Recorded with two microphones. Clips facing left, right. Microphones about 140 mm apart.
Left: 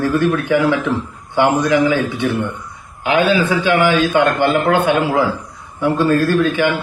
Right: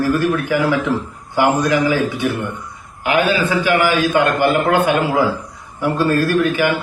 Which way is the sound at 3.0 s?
25° left (ahead or behind).